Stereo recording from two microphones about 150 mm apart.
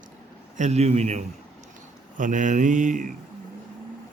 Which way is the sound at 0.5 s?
50° right (ahead or behind).